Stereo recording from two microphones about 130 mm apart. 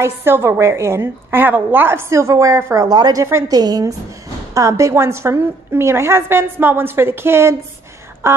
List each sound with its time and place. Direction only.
0.0 s a woman's voice: 20° right (ahead or behind)